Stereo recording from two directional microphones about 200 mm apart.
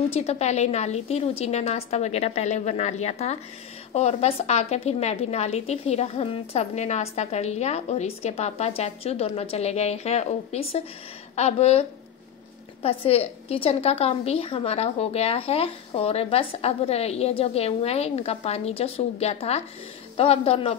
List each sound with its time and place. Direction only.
0.1 s a woman's voice: 35° left (ahead or behind)
12.8 s a woman's voice: 30° left (ahead or behind)